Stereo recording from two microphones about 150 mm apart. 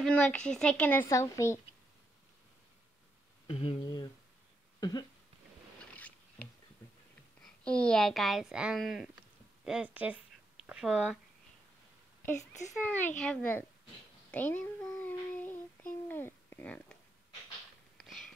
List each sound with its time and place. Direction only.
0.0 s a woman's voice: 10° left (ahead or behind)
1.0 s a woman's voice: 20° left (ahead or behind)
3.4 s speech: 40° left (ahead or behind)
3.8 s speech: 30° left (ahead or behind)
4.7 s cough: 25° left (ahead or behind)
5.9 s rowboat: 10° left (ahead or behind)
7.6 s speech: 5° left (ahead or behind)
12.4 s a woman's voice: 15° left (ahead or behind)
14.3 s child singing: 10° left (ahead or behind)
17.9 s a sound: centre (ahead or behind)